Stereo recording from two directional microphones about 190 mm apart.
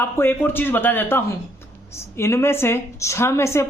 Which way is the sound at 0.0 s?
10° left (ahead or behind).